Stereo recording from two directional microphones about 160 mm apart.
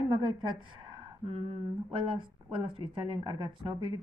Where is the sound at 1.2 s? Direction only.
35° right (ahead or behind).